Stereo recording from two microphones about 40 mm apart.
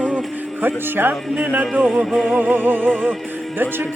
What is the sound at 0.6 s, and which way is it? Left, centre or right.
Speech, right.